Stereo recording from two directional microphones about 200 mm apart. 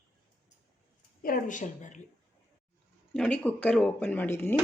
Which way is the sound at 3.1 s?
5° left (ahead or behind).